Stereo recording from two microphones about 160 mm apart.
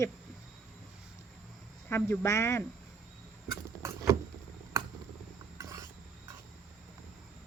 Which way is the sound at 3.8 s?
20° right (ahead or behind).